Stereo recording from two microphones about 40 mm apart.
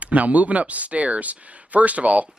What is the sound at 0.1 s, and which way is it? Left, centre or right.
Speech, right.